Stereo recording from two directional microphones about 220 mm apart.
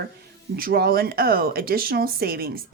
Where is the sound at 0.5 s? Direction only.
40° right (ahead or behind).